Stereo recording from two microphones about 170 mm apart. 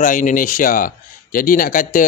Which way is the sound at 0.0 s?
50° left (ahead or behind).